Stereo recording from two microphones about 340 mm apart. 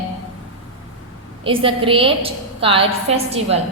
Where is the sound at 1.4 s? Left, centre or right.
Centre.